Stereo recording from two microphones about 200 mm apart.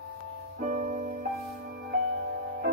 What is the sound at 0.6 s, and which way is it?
Music, 45° right (ahead or behind).